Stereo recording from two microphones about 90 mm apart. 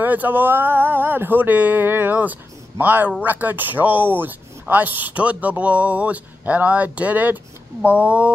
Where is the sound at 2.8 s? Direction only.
20° right (ahead or behind).